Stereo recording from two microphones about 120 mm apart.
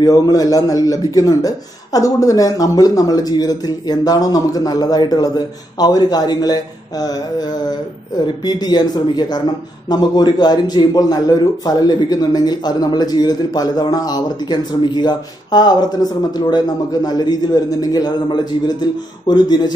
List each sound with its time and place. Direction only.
0.0 s a man's voice: 30° left (ahead or behind)